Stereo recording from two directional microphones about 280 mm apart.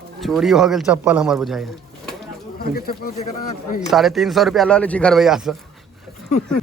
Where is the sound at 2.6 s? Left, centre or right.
Left.